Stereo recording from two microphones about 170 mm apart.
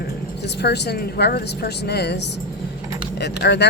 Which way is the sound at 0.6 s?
75° left (ahead or behind).